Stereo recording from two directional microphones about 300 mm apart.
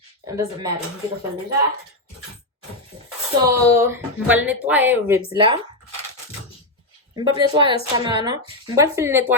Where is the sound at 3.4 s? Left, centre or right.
Centre.